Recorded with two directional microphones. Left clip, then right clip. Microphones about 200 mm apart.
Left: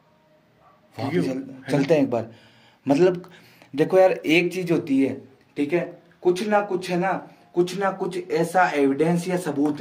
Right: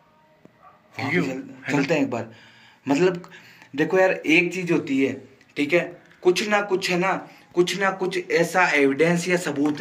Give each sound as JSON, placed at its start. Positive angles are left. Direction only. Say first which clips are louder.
{"t": 1.7, "sound": "speech", "louder": "left 2 dB", "side_deg": 55}